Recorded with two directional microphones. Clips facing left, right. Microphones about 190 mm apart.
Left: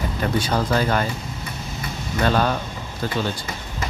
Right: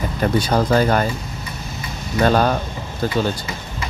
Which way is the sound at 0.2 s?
40° right (ahead or behind).